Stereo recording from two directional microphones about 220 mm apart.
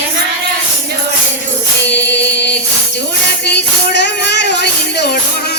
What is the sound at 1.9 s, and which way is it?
Music, 50° left (ahead or behind).